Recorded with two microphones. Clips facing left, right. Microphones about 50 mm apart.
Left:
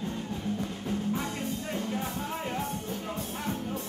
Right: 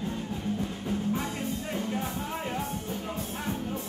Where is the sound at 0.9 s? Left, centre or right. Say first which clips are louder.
Right 1 dB; centre.